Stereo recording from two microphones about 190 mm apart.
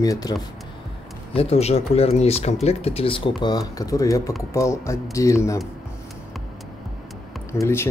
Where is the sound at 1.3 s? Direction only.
30° left (ahead or behind); by 5.6 s 15° left (ahead or behind).